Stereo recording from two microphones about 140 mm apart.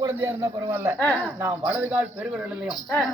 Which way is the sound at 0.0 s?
20° right (ahead or behind).